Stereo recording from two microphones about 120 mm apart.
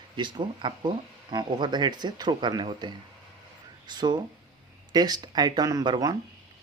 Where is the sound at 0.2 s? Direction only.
40° right (ahead or behind).